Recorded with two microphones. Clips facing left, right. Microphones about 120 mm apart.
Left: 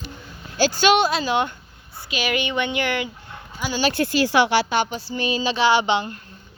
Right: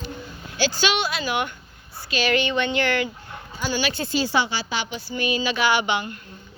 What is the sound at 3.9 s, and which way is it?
Speech, 85° left.